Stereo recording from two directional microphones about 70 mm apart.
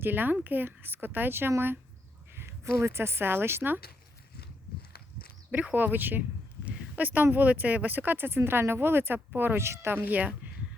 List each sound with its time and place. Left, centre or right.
0.0 s speech: right
5.5 s speech: right